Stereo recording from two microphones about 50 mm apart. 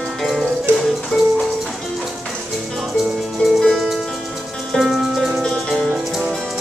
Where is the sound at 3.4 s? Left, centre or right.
Centre.